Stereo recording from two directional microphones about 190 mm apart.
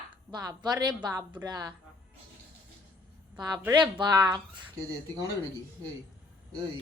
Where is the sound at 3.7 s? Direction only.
25° right (ahead or behind).